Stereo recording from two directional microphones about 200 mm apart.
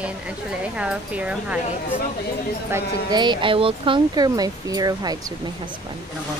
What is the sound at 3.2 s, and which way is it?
Speech, 25° right (ahead or behind).